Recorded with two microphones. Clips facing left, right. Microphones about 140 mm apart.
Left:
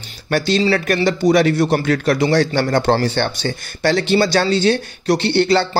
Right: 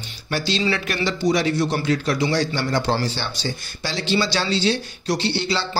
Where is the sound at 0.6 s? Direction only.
45° left (ahead or behind).